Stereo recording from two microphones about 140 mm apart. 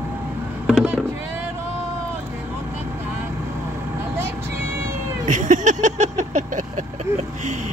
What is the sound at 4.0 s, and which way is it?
Vehicle, 15° right (ahead or behind).